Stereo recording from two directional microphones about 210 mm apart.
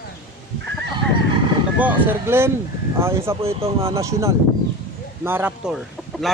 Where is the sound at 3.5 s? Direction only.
25° right (ahead or behind).